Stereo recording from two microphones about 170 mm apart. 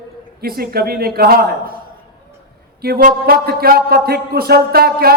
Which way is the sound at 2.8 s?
65° right (ahead or behind).